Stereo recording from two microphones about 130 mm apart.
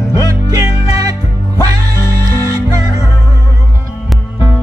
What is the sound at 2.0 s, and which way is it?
Music, 20° left (ahead or behind).